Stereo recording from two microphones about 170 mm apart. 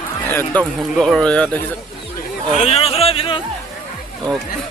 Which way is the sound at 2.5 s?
35° left (ahead or behind).